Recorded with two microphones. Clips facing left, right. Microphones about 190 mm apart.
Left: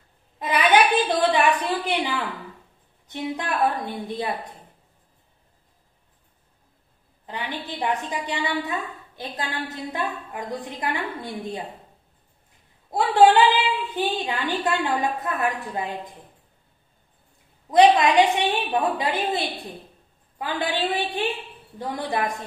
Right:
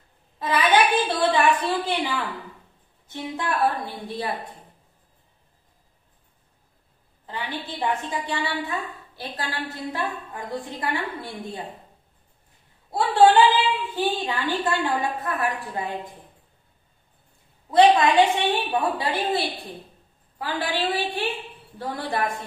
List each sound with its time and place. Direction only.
0.4 s a sound: 20° left (ahead or behind)
3.1 s a woman's voice: 20° left (ahead or behind)
7.2 s a woman's voice: 20° left (ahead or behind)
12.9 s a woman's voice: 20° left (ahead or behind)
17.6 s a woman's voice: 15° left (ahead or behind)